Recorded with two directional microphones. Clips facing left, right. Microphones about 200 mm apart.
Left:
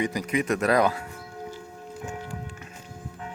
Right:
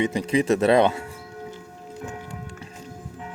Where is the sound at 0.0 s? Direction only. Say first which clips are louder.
Right 4 dB; 30° right (ahead or behind).